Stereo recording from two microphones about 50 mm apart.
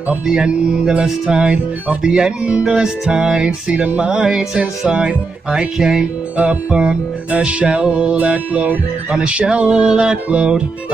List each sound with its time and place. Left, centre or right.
0.3 s music: centre